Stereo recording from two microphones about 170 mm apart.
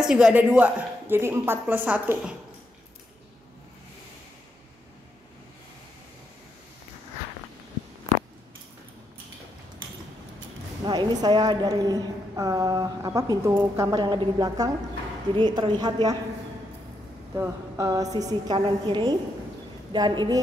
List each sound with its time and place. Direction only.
0.0 s speech: 5° right (ahead or behind)
10.8 s a woman's voice: 25° right (ahead or behind)
17.4 s a woman's voice: 20° right (ahead or behind)